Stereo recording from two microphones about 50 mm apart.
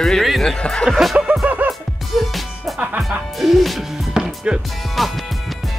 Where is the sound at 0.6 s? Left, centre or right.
Centre.